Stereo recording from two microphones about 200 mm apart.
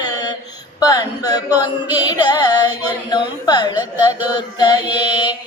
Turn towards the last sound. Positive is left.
turn(degrees=25)  # may be behind; listen again after turning